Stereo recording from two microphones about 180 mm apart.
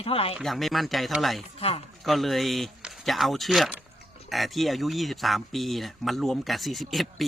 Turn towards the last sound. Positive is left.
turn(degrees=0)  # may be behind; listen again after turning